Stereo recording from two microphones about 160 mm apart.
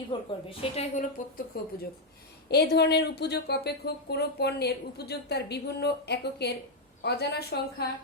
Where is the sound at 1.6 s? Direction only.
75° left (ahead or behind).